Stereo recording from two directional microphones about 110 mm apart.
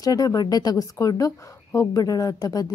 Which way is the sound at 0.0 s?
35° left (ahead or behind).